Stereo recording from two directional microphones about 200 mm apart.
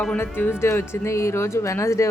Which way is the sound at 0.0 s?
10° left (ahead or behind).